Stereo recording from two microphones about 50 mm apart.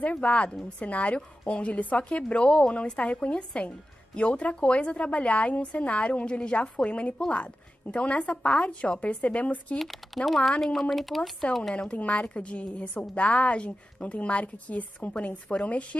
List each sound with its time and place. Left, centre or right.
0.2 s a woman's voice: left
9.8 s speech: centre
11.9 s a woman's voice: left